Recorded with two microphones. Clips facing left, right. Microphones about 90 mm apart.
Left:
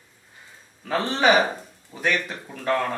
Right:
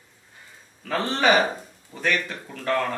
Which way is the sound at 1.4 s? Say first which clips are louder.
Right 1 dB; centre (ahead or behind).